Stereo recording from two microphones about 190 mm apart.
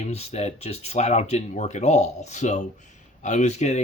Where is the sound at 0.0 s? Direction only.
35° left (ahead or behind).